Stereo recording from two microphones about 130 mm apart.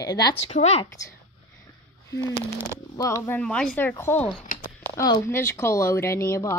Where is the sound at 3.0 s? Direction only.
25° left (ahead or behind).